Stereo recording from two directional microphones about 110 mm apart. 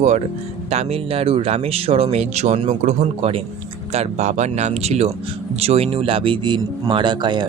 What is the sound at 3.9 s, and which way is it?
Speech, 80° right.